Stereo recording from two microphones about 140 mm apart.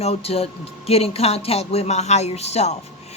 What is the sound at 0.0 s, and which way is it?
A man's voice, 45° left (ahead or behind).